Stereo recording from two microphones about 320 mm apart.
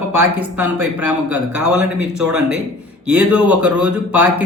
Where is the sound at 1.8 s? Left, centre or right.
Centre.